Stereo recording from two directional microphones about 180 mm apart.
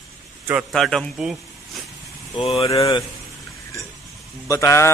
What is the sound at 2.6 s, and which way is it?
Speech, 20° left (ahead or behind).